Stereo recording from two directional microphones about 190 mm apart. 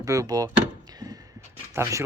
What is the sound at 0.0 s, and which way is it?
Door, 20° right (ahead or behind).